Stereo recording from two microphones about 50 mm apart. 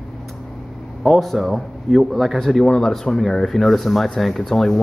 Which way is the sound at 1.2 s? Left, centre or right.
Centre.